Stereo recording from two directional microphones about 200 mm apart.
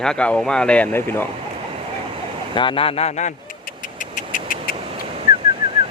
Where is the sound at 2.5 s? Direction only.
25° left (ahead or behind).